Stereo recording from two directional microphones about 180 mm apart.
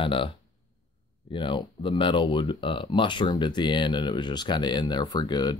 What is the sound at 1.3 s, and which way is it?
Speech, 30° left (ahead or behind).